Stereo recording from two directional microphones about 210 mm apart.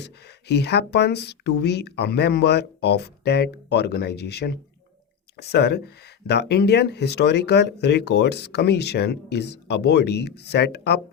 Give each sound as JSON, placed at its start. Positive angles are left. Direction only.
{"t": 0.0, "sound": "speech", "side_deg": 50}